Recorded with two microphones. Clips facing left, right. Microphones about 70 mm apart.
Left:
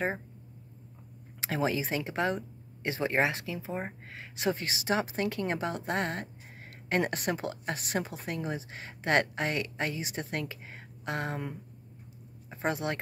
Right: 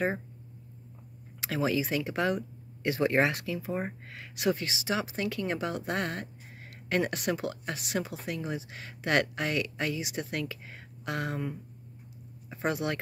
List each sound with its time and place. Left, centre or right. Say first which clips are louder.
1.4 s speech: right 1 dB; left
4.6 s speech: left 2 dB; left